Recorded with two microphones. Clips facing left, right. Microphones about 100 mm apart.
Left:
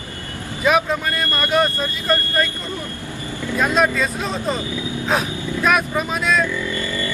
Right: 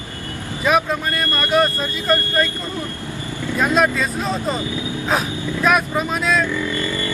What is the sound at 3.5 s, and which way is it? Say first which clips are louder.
Speech: even; centre (ahead or behind).